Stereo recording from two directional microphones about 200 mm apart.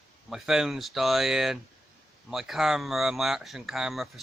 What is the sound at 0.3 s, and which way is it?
Speech, centre (ahead or behind).